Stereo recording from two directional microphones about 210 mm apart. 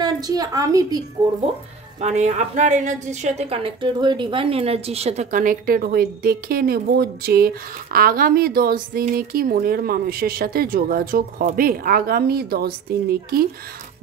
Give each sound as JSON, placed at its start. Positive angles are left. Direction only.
{"t": 0.0, "sound": "a woman's voice", "side_deg": -20}
{"t": 2.0, "sound": "a woman's voice", "side_deg": -35}